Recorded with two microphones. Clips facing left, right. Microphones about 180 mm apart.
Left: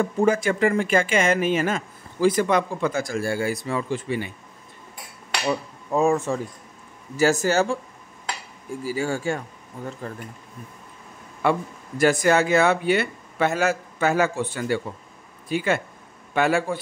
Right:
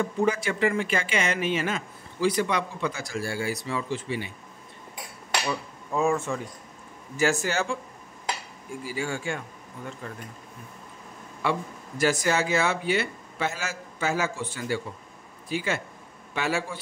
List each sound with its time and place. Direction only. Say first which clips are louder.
0.0 s speech: left 5 dB; 45° left (ahead or behind)
5.5 s speech: left 6 dB; 35° left (ahead or behind)
8.8 s speech: left 6 dB; 40° left (ahead or behind)
11.4 s a man's voice: left 5 dB; 50° left (ahead or behind)